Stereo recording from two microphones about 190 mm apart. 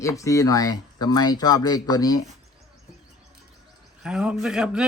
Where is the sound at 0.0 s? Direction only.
15° left (ahead or behind).